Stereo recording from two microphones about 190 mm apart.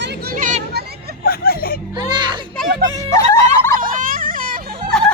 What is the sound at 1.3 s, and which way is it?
Music, 50° left (ahead or behind).